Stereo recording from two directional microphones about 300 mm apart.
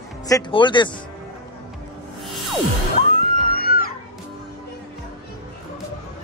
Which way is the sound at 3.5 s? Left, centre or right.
Left.